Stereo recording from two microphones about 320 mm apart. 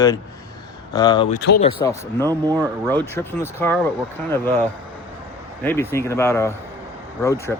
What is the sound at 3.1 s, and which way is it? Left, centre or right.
Speech, centre.